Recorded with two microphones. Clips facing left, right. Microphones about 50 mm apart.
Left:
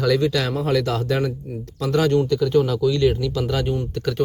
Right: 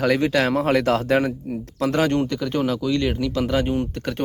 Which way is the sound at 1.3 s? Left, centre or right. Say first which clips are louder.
Right 3 dB; right.